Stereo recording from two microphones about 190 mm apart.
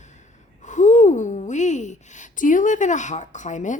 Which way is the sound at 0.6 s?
40° left (ahead or behind).